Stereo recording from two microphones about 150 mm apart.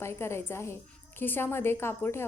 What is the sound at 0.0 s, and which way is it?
A woman's voice, 15° left (ahead or behind).